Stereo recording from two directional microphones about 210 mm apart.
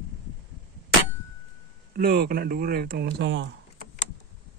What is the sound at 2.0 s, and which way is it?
Speech, 45° right (ahead or behind).